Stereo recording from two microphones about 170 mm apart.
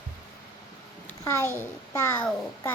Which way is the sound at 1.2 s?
15° left (ahead or behind).